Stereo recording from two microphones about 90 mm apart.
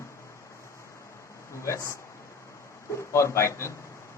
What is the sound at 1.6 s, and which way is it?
Speech, 35° left (ahead or behind).